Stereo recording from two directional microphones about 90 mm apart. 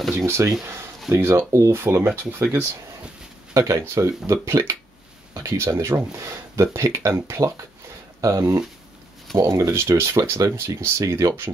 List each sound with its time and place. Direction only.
0.3 s speech: 30° right (ahead or behind)